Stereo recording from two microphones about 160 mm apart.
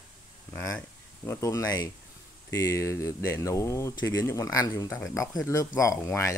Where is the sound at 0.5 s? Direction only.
15° left (ahead or behind).